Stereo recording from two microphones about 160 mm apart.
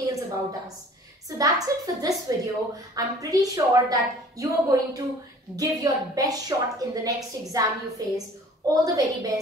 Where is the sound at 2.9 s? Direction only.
20° right (ahead or behind).